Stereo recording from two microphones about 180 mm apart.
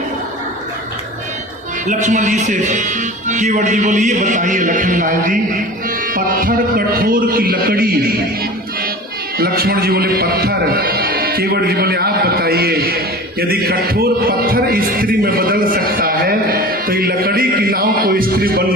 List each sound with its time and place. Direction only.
1.9 s speech: 45° right (ahead or behind)
9.4 s a man's voice: 55° right (ahead or behind)